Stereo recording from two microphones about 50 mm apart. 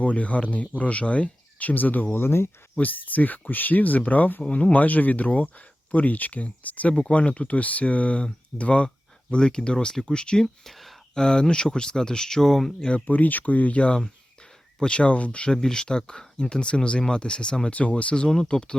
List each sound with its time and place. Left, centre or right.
0.0 s speech: left
2.1 s speech: left
2.8 s speech: left; by 10.5 s centre
10.7 s a sound: centre
11.2 s speech: centre
13.1 s speech: left
15.5 s speech: centre